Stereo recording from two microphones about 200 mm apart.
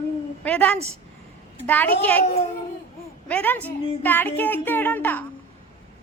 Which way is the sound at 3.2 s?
10° left (ahead or behind).